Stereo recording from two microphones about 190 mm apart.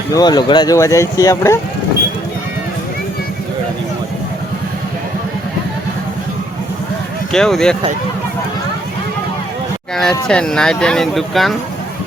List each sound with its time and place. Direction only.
0.1 s speech: 20° left (ahead or behind)
7.3 s speech: 5° left (ahead or behind)
9.9 s speech: centre (ahead or behind)